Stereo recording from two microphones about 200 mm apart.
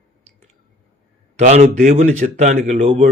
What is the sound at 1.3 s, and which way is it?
Speech, 35° right (ahead or behind).